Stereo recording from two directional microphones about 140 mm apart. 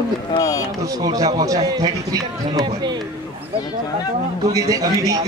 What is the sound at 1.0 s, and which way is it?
A man's voice, 30° right (ahead or behind).